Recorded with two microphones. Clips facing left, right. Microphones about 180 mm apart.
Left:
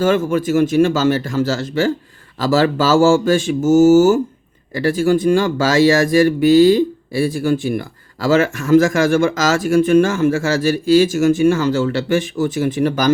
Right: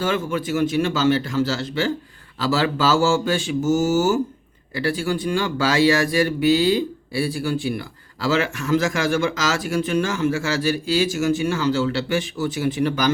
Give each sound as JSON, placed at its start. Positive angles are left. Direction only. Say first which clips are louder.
{"t": 0.0, "sound": "speech", "louder": "left 7 dB", "side_deg": 45}